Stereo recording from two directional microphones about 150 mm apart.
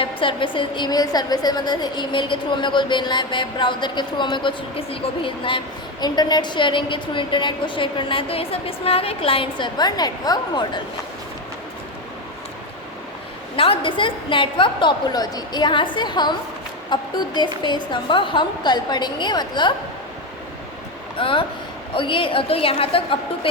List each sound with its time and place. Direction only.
0.0 s a woman's voice: 35° left (ahead or behind)
13.6 s a woman's voice: 35° left (ahead or behind)
21.2 s a woman's voice: 35° left (ahead or behind)